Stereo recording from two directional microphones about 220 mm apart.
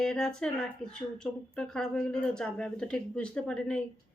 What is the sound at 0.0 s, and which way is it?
Speech, 5° left (ahead or behind).